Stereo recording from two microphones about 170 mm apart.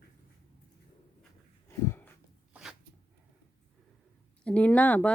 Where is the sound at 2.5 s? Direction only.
5° right (ahead or behind).